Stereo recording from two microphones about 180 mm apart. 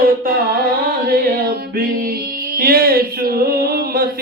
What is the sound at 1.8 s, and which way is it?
Music, 55° right (ahead or behind).